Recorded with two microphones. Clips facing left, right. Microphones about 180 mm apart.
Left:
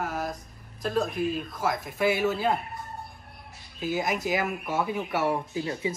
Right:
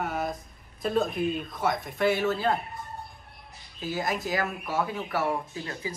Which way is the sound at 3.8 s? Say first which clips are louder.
Left 2 dB; 15° left (ahead or behind).